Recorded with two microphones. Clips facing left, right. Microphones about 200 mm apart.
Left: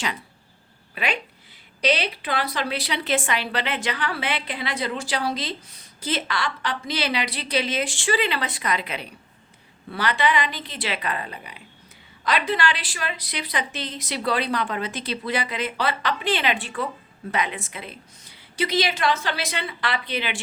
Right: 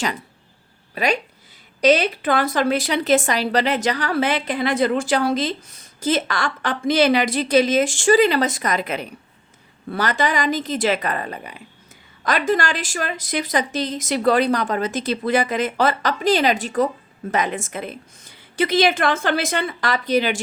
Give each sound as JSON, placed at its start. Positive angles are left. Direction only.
{"t": 0.9, "sound": "speech", "side_deg": -40}